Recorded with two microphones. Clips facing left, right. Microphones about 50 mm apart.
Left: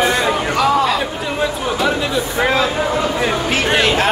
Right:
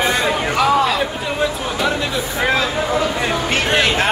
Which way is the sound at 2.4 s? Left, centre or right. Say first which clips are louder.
Left 2 dB; centre.